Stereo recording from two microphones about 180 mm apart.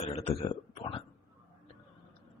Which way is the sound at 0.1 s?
35° left (ahead or behind).